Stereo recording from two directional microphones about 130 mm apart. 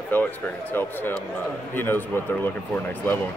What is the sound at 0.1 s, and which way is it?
Speech, 15° left (ahead or behind).